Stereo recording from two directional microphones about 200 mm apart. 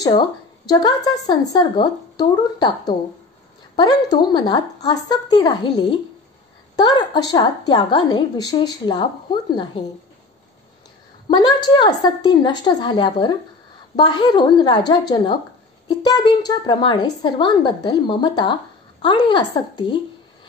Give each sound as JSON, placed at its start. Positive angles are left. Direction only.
{"t": 0.0, "sound": "a woman's voice", "side_deg": 20}
{"t": 3.7, "sound": "a woman's voice", "side_deg": 20}
{"t": 11.2, "sound": "a woman's voice", "side_deg": 20}